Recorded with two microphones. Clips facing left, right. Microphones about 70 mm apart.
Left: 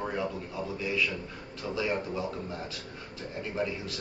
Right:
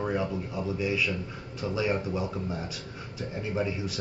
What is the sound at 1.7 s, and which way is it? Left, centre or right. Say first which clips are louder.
A man's voice: right 2 dB; centre.